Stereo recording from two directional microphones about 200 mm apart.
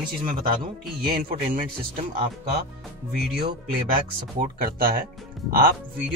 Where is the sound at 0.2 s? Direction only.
45° right (ahead or behind).